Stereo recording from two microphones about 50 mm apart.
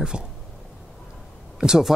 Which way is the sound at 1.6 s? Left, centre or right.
Centre.